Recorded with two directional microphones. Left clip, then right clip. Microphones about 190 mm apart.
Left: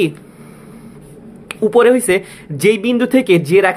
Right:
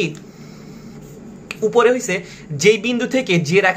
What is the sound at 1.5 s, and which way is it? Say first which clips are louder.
Speech: left 4 dB; 45° left (ahead or behind).